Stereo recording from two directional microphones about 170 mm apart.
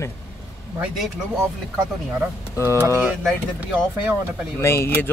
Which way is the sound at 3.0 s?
5° right (ahead or behind).